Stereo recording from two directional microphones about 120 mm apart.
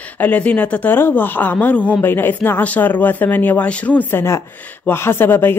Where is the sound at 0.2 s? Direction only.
10° left (ahead or behind).